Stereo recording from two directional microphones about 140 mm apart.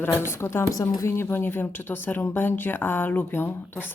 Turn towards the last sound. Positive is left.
turn(degrees=15)  # may be behind; listen again after turning